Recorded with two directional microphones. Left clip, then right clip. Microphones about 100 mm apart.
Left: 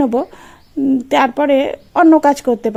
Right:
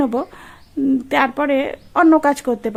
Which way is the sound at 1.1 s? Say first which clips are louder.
Left 5 dB; 25° left (ahead or behind).